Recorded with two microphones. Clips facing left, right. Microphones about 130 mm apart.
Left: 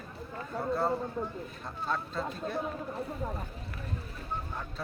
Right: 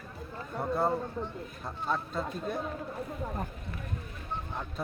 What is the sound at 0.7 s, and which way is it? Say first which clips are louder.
Speech: right 1 dB; 15° right (ahead or behind).